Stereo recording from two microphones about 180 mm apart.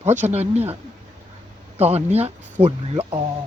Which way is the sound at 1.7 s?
35° right (ahead or behind).